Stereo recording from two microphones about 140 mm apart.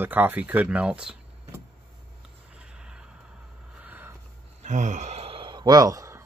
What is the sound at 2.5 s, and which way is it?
Snort, 5° right (ahead or behind).